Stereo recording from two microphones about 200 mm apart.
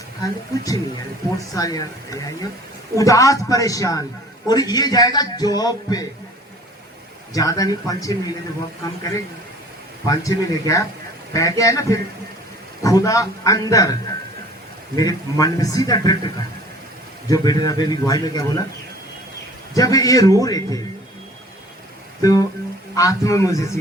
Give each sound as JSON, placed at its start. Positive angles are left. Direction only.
{"t": 0.2, "sound": "a man's voice", "side_deg": 15}
{"t": 7.3, "sound": "a man's voice", "side_deg": 15}
{"t": 10.1, "sound": "a man's voice", "side_deg": 15}
{"t": 14.9, "sound": "a man's voice", "side_deg": 20}
{"t": 19.7, "sound": "a man's voice", "side_deg": 15}
{"t": 22.2, "sound": "a man's voice", "side_deg": 15}